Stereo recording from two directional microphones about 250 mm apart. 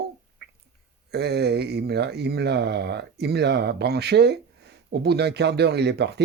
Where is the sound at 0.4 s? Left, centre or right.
Right.